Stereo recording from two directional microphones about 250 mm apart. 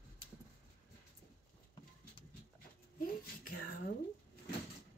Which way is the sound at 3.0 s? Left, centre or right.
Left.